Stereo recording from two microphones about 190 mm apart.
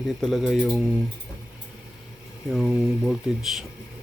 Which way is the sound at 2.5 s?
Centre (ahead or behind).